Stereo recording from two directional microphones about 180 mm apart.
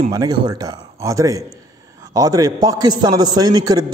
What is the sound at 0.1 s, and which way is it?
A man's voice, 25° right (ahead or behind).